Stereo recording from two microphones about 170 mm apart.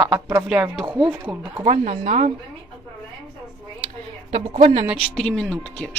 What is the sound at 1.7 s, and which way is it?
Speech, 45° right (ahead or behind).